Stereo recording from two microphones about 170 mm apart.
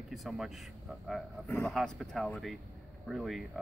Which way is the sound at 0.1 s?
Centre (ahead or behind).